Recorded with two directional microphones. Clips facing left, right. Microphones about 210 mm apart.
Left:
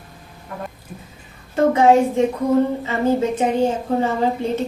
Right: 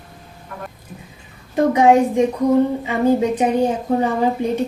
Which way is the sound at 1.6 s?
15° right (ahead or behind).